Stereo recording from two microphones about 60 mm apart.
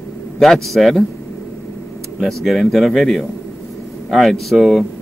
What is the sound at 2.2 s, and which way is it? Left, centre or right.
A man's voice, centre.